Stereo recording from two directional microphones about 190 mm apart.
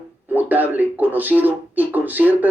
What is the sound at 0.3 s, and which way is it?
Speech, 10° right (ahead or behind).